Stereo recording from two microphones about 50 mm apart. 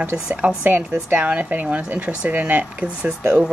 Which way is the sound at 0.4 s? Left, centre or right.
Right.